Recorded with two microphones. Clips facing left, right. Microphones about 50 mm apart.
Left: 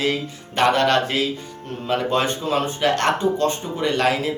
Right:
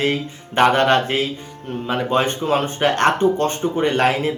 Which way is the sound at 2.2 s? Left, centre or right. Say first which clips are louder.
Right 2 dB; right.